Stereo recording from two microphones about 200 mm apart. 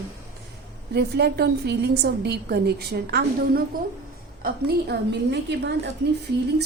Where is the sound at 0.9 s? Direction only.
55° right (ahead or behind).